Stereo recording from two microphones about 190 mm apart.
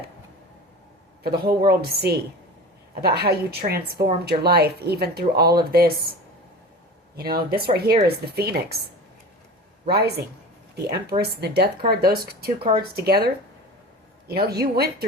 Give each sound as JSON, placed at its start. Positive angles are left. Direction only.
{"t": 1.2, "sound": "speech", "side_deg": -55}
{"t": 7.2, "sound": "speech", "side_deg": -55}
{"t": 9.9, "sound": "speech", "side_deg": -55}